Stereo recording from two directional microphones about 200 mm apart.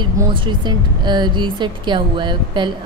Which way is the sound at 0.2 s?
25° right (ahead or behind).